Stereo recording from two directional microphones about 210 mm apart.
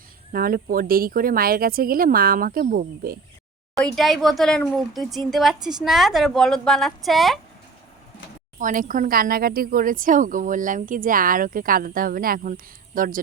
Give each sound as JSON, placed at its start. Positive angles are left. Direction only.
{"t": 0.3, "sound": "speech", "side_deg": -40}
{"t": 3.8, "sound": "a woman's voice", "side_deg": 0}
{"t": 8.5, "sound": "a woman's voice", "side_deg": -40}